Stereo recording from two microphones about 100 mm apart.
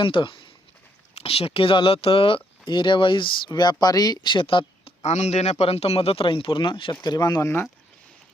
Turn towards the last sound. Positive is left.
turn(degrees=40)  # may be behind; listen again after turning